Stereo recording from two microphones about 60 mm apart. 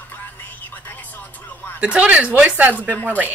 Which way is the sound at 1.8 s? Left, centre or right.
Right.